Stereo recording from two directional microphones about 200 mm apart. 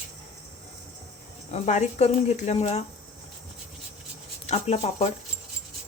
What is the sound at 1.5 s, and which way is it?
Speech, 35° left (ahead or behind).